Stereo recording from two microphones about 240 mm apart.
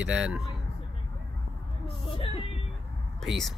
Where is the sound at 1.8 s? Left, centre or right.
Left.